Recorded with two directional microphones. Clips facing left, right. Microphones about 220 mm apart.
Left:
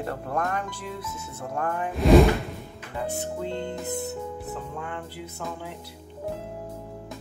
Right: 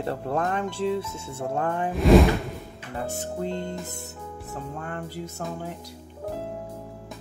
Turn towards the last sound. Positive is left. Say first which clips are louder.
# right 2 dB
turn(degrees=-40)  # may be behind; listen again after turning